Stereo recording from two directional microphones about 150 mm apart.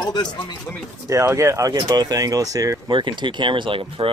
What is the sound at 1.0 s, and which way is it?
Speech, 20° right (ahead or behind).